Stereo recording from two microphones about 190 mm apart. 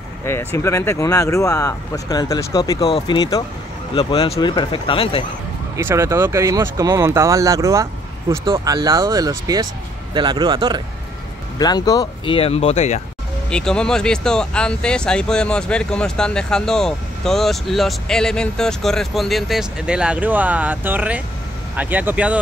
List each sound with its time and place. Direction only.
0.2 s speech: 15° left (ahead or behind)
5.8 s speech: 15° right (ahead or behind)
11.5 s speech: 20° left (ahead or behind)
13.5 s speech: 5° left (ahead or behind)